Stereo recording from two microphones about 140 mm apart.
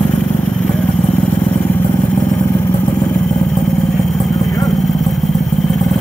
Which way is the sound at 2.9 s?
Centre (ahead or behind).